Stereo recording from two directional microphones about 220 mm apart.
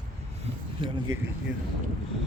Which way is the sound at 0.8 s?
25° right (ahead or behind).